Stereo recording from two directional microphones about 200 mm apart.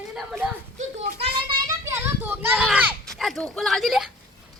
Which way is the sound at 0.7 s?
35° right (ahead or behind).